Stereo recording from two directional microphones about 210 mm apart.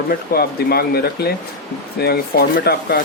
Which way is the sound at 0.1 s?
45° left (ahead or behind).